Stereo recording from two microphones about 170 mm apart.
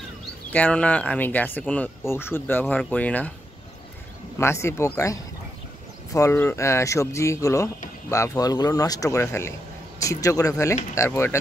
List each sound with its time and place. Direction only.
0.5 s speech: 10° left (ahead or behind)
4.4 s speech: 15° left (ahead or behind)